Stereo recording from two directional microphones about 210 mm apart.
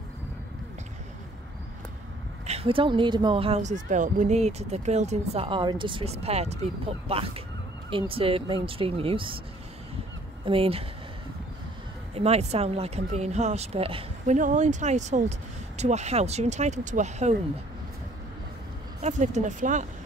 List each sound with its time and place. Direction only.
2.4 s speech: 30° right (ahead or behind)
10.4 s speech: 25° right (ahead or behind)
12.1 s speech: 30° right (ahead or behind)
18.9 s speech: 35° right (ahead or behind)